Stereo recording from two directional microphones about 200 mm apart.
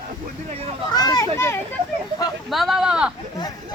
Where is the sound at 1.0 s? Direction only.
20° left (ahead or behind).